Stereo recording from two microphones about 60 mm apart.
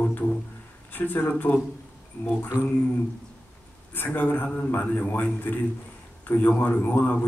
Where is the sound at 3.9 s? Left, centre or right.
Left.